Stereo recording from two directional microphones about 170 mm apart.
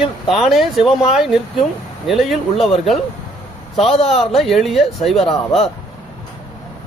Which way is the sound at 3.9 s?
35° left (ahead or behind).